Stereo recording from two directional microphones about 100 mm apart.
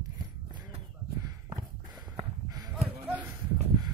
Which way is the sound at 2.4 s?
40° right (ahead or behind).